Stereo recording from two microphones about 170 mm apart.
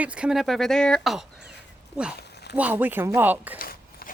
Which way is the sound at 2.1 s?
75° left (ahead or behind).